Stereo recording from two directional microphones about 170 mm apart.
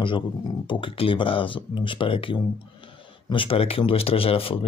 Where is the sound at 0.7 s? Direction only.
30° left (ahead or behind).